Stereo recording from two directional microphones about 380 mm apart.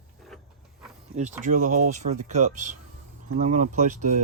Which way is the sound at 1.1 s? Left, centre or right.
Centre.